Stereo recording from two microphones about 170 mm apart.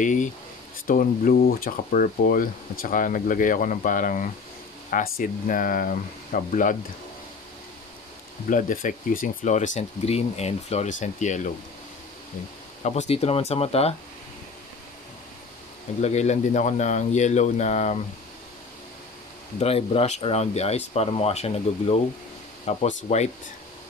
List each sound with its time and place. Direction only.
0.0 s speech: 50° left (ahead or behind)
8.5 s speech: 50° left (ahead or behind)
12.8 s speech: 40° left (ahead or behind)
16.0 s speech: 40° left (ahead or behind)
19.6 s speech: 35° left (ahead or behind)